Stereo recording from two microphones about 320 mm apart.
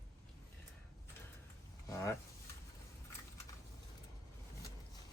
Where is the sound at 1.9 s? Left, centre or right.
Centre.